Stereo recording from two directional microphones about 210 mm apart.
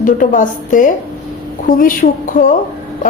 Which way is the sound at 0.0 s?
40° left (ahead or behind).